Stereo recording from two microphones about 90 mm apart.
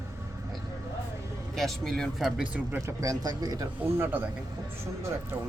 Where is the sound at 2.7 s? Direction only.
35° right (ahead or behind).